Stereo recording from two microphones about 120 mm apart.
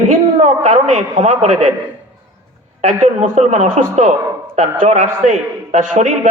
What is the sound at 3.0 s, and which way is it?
A man's voice, 80° right.